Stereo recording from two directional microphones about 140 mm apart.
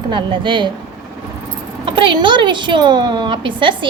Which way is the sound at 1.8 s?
35° right (ahead or behind).